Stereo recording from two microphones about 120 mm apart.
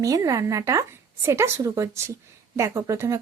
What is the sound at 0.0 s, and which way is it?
Speech, 25° right (ahead or behind).